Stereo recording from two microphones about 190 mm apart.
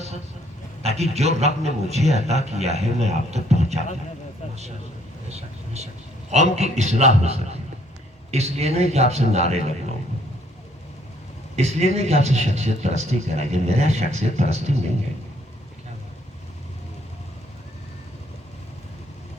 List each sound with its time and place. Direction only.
0.8 s a man's voice: 35° right (ahead or behind)
5.3 s a man's voice: 35° right (ahead or behind)
11.5 s a man's voice: 35° right (ahead or behind)